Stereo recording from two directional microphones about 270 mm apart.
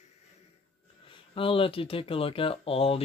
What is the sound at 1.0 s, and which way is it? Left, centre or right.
Speech, centre.